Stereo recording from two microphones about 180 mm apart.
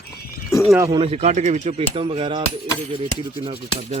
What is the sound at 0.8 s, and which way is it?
Speech, 20° right (ahead or behind).